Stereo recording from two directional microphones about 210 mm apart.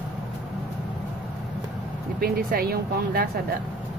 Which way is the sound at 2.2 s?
45° right (ahead or behind).